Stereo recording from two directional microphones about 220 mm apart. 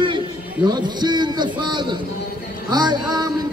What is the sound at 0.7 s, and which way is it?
A man's voice, 20° right (ahead or behind).